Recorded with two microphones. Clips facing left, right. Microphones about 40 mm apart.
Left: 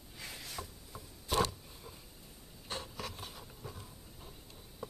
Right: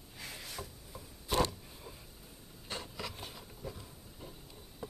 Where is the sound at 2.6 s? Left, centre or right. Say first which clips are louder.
Even; centre.